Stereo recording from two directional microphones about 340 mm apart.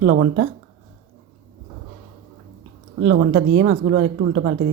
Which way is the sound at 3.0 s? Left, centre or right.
Right.